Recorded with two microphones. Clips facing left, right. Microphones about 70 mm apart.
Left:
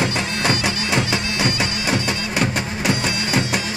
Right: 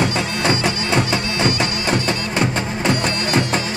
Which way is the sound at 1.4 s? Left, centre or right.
Centre.